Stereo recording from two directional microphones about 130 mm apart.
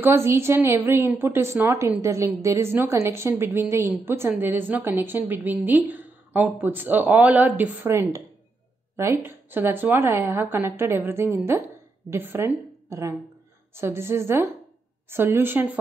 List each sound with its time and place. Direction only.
0.0 s a woman's voice: 20° right (ahead or behind)
7.9 s a woman's voice: 25° right (ahead or behind)